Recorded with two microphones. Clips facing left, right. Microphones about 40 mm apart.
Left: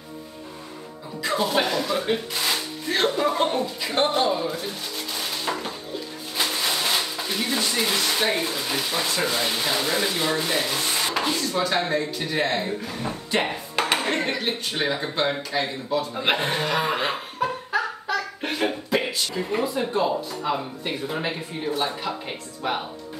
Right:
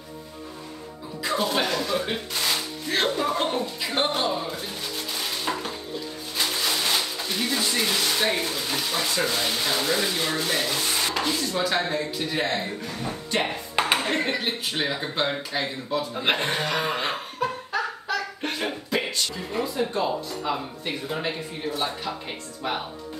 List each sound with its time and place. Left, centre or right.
1.2 s speech: centre
3.2 s chuckle: centre
4.3 s speech: centre
5.5 s a sound: centre
6.3 s speech: centre
15.2 s speech: centre
15.9 s chuckle: centre
19.3 s speech: left
19.9 s speech: centre